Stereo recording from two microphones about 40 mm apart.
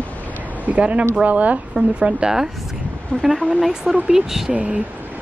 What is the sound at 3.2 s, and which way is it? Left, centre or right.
Speech, centre.